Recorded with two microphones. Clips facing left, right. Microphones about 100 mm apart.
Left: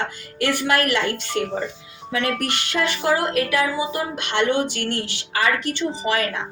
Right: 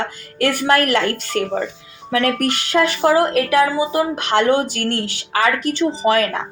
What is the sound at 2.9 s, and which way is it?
Speech, 35° right (ahead or behind).